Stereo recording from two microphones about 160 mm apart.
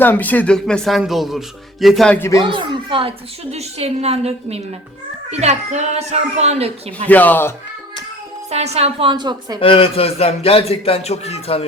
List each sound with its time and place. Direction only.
0.0 s speech: 10° left (ahead or behind)
2.4 s a woman's voice: 30° right (ahead or behind)
7.1 s speech: 10° left (ahead or behind)
8.4 s a woman's voice: 40° right (ahead or behind); by 9.6 s 25° right (ahead or behind)
9.6 s speech: 35° left (ahead or behind)